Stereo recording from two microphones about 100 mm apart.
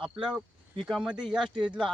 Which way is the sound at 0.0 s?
5° right (ahead or behind).